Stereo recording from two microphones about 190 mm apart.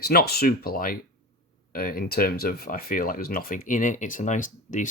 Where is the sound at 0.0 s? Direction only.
55° left (ahead or behind).